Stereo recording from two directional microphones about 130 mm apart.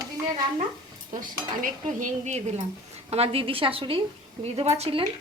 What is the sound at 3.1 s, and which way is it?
A woman's voice, 50° right (ahead or behind).